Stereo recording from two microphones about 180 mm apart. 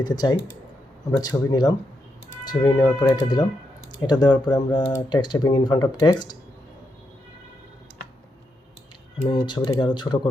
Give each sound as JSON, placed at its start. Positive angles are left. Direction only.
{"t": 0.0, "sound": "speech", "side_deg": 25}
{"t": 9.2, "sound": "speech", "side_deg": 25}